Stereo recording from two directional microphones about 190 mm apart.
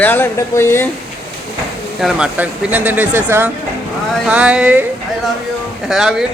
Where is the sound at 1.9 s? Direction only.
5° right (ahead or behind).